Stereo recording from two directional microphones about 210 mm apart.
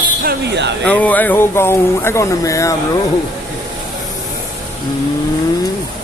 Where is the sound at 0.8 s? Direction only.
5° left (ahead or behind).